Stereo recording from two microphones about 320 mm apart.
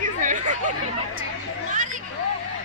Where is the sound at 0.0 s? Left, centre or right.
Right.